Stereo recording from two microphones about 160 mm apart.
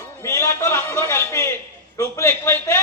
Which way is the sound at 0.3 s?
15° left (ahead or behind).